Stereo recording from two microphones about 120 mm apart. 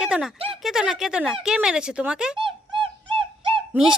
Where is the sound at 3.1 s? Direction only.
50° right (ahead or behind).